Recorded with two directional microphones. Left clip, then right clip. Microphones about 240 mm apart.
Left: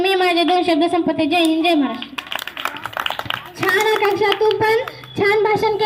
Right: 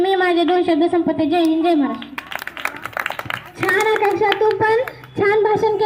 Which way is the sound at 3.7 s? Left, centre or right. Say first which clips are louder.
Even; left.